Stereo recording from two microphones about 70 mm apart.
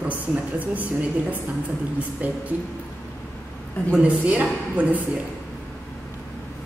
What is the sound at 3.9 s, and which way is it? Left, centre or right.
A woman's voice, centre.